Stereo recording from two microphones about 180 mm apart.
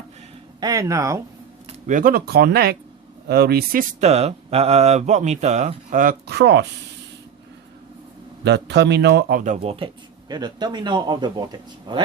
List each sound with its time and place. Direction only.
0.6 s speech: 20° right (ahead or behind)
1.9 s speech: 50° right (ahead or behind)
4.0 s speech: 35° right (ahead or behind)
6.2 s speech: 65° right (ahead or behind)
8.4 s speech: 70° right (ahead or behind)
9.6 s speech: 30° right (ahead or behind)